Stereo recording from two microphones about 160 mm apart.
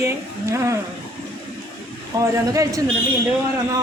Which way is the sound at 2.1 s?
20° right (ahead or behind).